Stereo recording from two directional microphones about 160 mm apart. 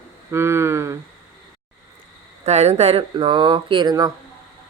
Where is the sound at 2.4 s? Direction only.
45° right (ahead or behind); by 4.1 s 25° right (ahead or behind).